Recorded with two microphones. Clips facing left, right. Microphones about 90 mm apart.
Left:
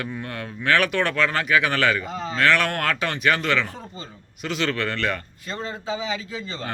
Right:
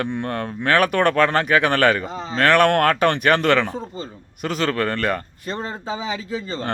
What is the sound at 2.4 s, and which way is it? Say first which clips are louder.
Speech: right 6 dB; 50° right (ahead or behind).